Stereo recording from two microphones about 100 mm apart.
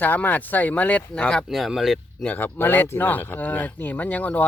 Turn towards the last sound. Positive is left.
turn(degrees=15)  # may be behind; listen again after turning